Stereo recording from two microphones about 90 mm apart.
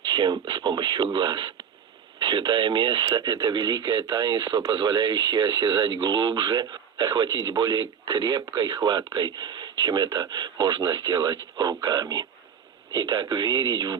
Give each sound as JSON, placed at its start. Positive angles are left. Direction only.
{"t": 0.0, "sound": "speech", "side_deg": -60}
{"t": 3.1, "sound": "speech", "side_deg": -50}